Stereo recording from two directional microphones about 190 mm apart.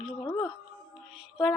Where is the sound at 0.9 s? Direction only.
Centre (ahead or behind).